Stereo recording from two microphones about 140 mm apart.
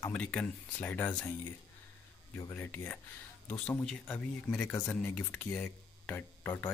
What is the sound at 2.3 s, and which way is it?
Speech, 15° left (ahead or behind).